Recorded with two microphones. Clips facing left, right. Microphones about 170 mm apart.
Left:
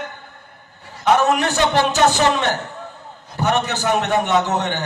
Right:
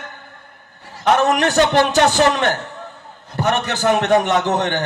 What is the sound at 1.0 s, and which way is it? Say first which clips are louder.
A man's voice: right 1 dB; 50° right (ahead or behind).